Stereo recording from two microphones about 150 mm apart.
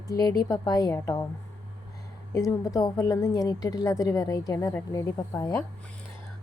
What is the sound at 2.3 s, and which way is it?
A woman's voice, 25° left (ahead or behind).